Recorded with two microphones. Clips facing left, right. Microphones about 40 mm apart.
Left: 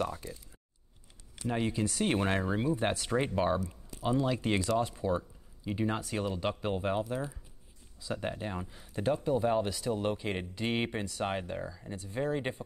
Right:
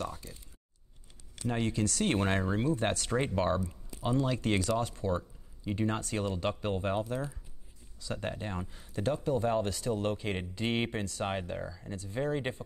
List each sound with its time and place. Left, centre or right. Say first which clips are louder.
0.0 s speech: left 4 dB; left
1.4 s speech: even; centre
2.1 s speech: even; centre
11.2 s speech: even; centre